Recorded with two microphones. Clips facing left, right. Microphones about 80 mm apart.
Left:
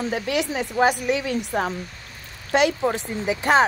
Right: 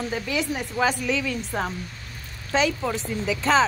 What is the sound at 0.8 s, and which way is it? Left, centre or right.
Speech, left.